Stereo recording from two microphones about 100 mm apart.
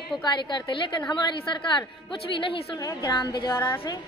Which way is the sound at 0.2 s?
50° left (ahead or behind).